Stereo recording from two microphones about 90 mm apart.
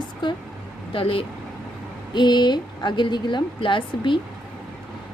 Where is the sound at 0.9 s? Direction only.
80° left.